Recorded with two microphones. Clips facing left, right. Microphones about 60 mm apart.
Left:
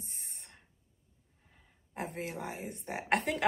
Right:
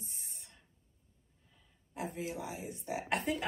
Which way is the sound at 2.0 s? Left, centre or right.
Left.